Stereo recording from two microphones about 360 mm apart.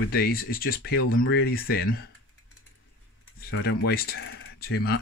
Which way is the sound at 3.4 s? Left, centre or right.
Left.